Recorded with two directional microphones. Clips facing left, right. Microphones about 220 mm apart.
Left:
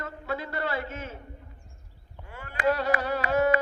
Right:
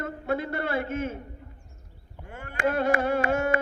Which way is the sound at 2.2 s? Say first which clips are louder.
Left 1 dB; 50° right (ahead or behind).